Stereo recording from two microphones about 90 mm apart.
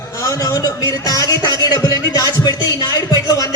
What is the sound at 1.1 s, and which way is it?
Speech, 40° left (ahead or behind).